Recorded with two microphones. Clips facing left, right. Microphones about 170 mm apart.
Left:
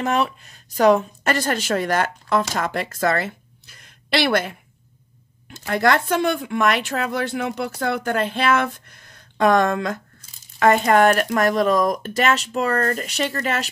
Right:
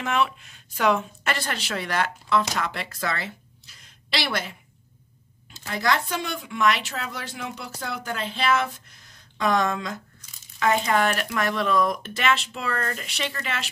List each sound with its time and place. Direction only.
0.0 s speech: 40° left (ahead or behind); by 4.6 s 55° left (ahead or behind)
5.7 s a woman's voice: 55° left (ahead or behind)